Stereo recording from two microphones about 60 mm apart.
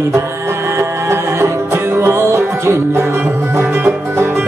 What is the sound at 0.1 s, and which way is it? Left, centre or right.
Music, right.